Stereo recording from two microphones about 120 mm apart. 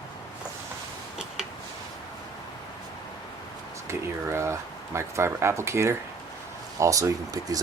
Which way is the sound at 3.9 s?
25° right (ahead or behind).